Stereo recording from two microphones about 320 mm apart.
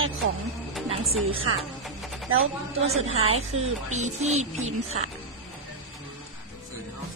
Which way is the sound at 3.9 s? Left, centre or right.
Right.